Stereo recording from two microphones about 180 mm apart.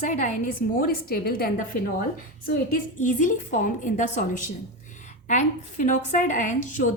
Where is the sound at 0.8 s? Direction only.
55° left (ahead or behind).